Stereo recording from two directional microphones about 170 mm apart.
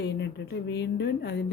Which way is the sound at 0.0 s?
85° left.